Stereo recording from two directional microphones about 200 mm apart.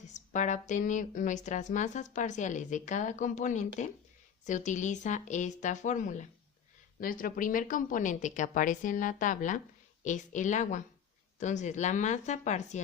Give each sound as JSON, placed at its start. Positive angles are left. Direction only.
{"t": 0.1, "sound": "a woman's voice", "side_deg": 40}